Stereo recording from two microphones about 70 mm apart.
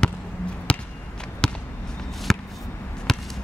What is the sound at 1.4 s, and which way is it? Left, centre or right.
Basketball bounce, centre.